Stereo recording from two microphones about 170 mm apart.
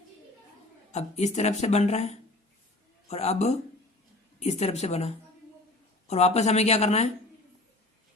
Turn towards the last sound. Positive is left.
turn(degrees=40)  # may be behind; listen again after turning